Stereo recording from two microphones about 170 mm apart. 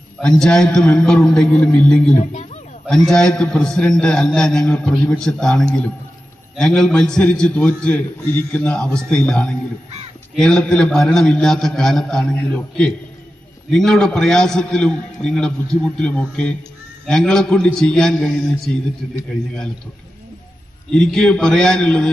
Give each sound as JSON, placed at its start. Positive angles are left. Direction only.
{"t": 0.2, "sound": "a man's voice", "side_deg": 5}
{"t": 2.1, "sound": "speech", "side_deg": 45}
{"t": 2.8, "sound": "a man's voice", "side_deg": 5}
{"t": 20.9, "sound": "a man's voice", "side_deg": 5}